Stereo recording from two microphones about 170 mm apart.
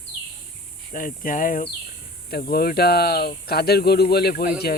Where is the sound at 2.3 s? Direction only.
65° left (ahead or behind).